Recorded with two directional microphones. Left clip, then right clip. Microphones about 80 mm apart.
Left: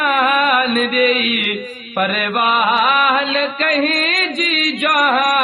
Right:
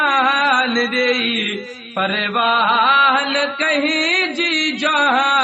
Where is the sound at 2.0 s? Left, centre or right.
Left.